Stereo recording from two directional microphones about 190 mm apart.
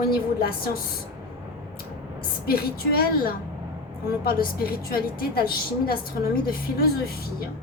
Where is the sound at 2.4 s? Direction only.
50° left (ahead or behind).